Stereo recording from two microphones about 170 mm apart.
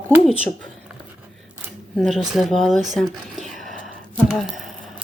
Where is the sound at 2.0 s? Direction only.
Centre (ahead or behind).